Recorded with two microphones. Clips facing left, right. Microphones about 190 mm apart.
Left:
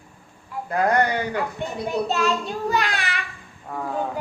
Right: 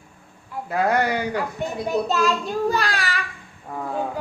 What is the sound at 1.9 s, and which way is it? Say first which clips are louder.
Speech: right 1 dB; 40° right (ahead or behind).